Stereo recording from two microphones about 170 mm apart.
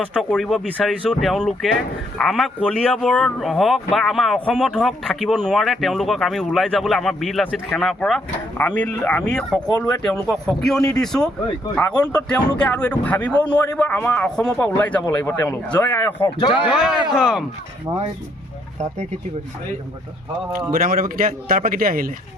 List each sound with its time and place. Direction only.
0.0 s a man's voice: 5° left (ahead or behind)
16.7 s a man's voice: 5° right (ahead or behind)
18.8 s speech: 40° right (ahead or behind)
20.7 s a man's voice: 55° right (ahead or behind)